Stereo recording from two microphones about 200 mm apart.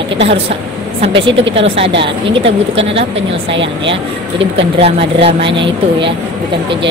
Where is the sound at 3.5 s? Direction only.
65° right (ahead or behind).